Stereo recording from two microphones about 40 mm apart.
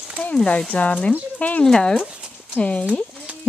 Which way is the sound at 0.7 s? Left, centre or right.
Left.